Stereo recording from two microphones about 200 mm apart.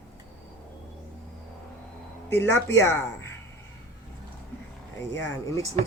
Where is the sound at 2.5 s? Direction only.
15° left (ahead or behind).